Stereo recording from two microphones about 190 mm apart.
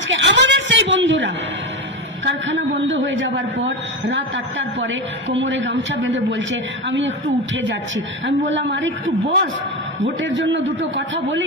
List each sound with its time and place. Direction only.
0.1 s bleat: 70° right (ahead or behind)
2.2 s a sound: 75° right (ahead or behind)
2.8 s a man's voice: 75° right (ahead or behind)